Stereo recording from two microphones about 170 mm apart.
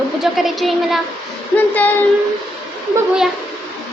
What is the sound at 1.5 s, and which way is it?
Speech, 10° left (ahead or behind).